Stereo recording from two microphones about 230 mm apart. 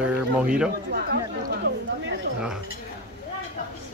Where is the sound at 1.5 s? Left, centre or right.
Right.